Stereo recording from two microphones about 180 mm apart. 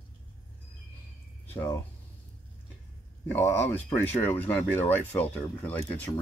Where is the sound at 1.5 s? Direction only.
10° left (ahead or behind).